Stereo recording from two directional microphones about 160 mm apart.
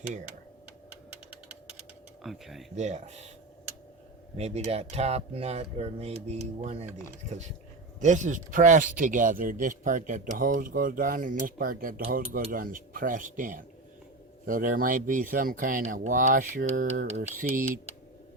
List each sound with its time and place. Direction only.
2.2 s speech: centre (ahead or behind)
2.7 s speech: 45° right (ahead or behind)
4.4 s speech: 40° right (ahead or behind)
7.9 s a man's voice: 50° right (ahead or behind)
17.1 s speech: 45° right (ahead or behind)
17.3 s a man's voice: 55° right (ahead or behind)